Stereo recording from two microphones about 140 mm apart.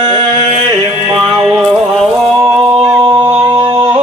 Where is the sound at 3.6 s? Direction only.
40° right (ahead or behind).